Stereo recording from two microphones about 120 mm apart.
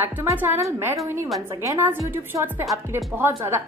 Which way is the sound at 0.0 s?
20° right (ahead or behind).